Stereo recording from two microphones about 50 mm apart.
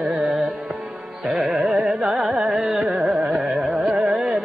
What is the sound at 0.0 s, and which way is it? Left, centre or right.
Music, centre.